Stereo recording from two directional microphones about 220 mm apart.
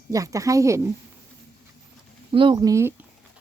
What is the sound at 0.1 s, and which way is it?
Speech, 15° right (ahead or behind).